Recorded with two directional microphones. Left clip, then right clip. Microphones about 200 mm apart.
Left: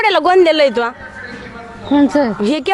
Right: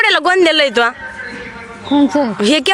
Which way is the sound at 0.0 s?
5° right (ahead or behind).